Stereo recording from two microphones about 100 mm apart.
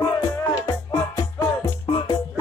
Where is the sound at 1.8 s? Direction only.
55° left (ahead or behind).